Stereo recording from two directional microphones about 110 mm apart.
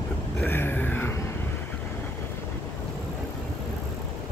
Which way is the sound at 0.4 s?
20° left (ahead or behind).